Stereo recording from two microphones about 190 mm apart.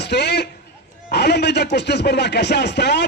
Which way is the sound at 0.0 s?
60° left (ahead or behind).